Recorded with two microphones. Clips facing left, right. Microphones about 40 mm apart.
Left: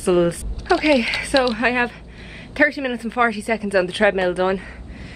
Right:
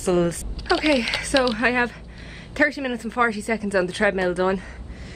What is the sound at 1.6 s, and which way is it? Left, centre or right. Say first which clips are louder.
A woman's voice: left 1 dB; centre.